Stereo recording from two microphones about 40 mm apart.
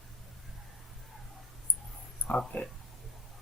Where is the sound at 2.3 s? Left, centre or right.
Left.